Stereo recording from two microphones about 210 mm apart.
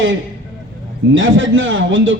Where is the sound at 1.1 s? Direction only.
65° right (ahead or behind).